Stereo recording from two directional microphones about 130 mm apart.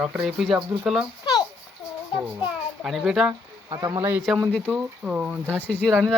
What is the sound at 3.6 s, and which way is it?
Speech, 25° right (ahead or behind).